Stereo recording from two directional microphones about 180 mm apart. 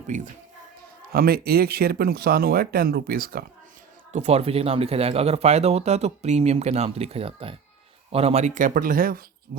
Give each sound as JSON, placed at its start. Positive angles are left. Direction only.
{"t": 0.1, "sound": "speech", "side_deg": -40}
{"t": 1.1, "sound": "speech", "side_deg": -55}
{"t": 4.1, "sound": "speech", "side_deg": -35}